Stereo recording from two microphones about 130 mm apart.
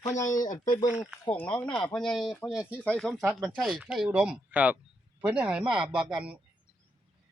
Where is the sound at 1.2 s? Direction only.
10° left (ahead or behind).